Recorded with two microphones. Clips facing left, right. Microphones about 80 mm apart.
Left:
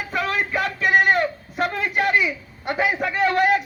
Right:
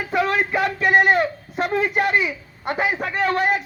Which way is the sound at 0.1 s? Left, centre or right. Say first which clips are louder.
Right 4 dB; centre.